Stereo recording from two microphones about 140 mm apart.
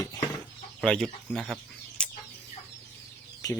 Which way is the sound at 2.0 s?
5° left (ahead or behind).